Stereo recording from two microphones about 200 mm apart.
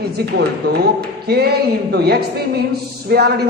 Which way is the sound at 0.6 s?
55° right (ahead or behind).